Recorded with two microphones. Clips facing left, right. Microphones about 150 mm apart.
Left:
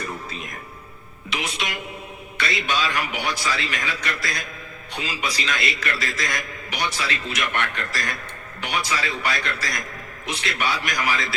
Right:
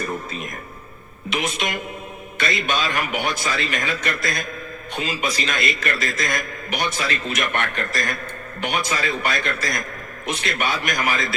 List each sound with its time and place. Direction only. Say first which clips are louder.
1.3 s a man's voice: right 4 dB; 50° right (ahead or behind)